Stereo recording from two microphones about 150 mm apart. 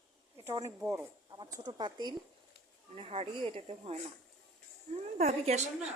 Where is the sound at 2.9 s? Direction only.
40° right (ahead or behind).